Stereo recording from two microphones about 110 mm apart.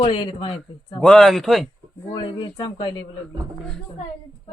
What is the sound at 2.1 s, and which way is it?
Speech, 45° left (ahead or behind).